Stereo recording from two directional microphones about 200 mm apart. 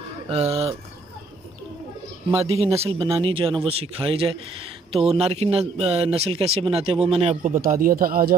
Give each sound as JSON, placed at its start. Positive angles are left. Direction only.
{"t": 0.3, "sound": "speech", "side_deg": -30}
{"t": 2.4, "sound": "speech", "side_deg": -30}